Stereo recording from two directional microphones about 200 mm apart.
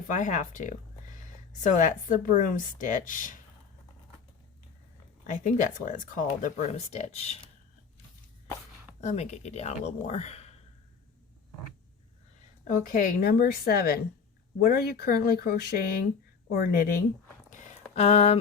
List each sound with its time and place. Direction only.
0.1 s speech: 40° left (ahead or behind)
5.2 s speech: 40° left (ahead or behind)
9.0 s speech: 35° left (ahead or behind)
12.6 s a woman's voice: 45° left (ahead or behind)
17.9 s speech: 30° left (ahead or behind)